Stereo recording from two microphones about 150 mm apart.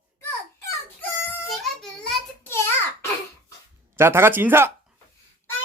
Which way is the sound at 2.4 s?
15° left (ahead or behind).